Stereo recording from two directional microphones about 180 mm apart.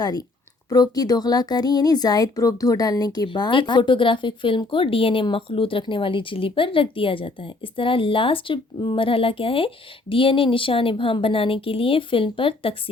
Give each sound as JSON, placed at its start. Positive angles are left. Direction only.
{"t": 0.0, "sound": "speech", "side_deg": 20}